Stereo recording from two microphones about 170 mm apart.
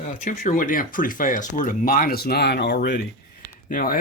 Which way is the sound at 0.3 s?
50° left (ahead or behind).